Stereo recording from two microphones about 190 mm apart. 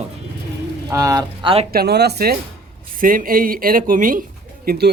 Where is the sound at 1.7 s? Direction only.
60° right (ahead or behind).